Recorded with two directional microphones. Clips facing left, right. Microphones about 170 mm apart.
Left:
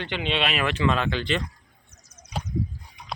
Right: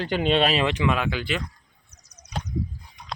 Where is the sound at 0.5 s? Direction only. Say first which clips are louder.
Right 1 dB; 15° right (ahead or behind).